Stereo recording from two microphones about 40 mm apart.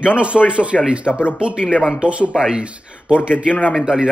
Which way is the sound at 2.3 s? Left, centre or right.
Centre.